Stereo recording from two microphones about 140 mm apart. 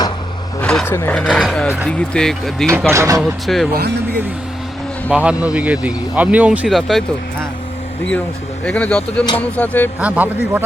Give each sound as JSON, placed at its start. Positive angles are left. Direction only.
{"t": 0.6, "sound": "a sound", "side_deg": 5}
{"t": 0.9, "sound": "speech", "side_deg": 15}
{"t": 1.3, "sound": "speech", "side_deg": 0}
{"t": 2.6, "sound": "speech", "side_deg": -20}
{"t": 3.2, "sound": "speech", "side_deg": 0}
{"t": 5.1, "sound": "speech", "side_deg": -10}
{"t": 6.7, "sound": "speech", "side_deg": 0}
{"t": 8.6, "sound": "speech", "side_deg": 10}
{"t": 10.0, "sound": "speech", "side_deg": -10}